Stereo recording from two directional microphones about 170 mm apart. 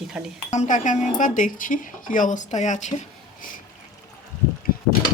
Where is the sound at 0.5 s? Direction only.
45° left (ahead or behind).